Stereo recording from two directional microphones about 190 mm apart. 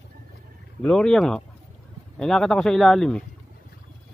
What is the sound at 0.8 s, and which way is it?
Speech, 5° left (ahead or behind).